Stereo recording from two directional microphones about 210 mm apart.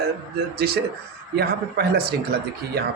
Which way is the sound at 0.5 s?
50° right (ahead or behind).